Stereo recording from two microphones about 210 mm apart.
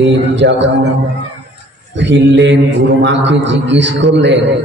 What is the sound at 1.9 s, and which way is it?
A man's voice, 60° right (ahead or behind).